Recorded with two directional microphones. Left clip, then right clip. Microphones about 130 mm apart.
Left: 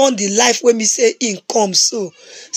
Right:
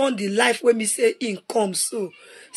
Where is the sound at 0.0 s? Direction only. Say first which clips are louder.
Left 7 dB; 40° left (ahead or behind).